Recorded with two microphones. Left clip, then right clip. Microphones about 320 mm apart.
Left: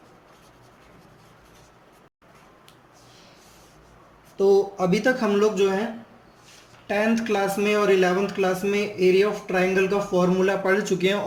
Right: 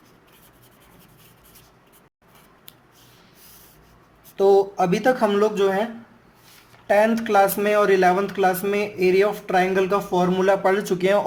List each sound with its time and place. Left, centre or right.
4.4 s speech: right
6.8 s speech: centre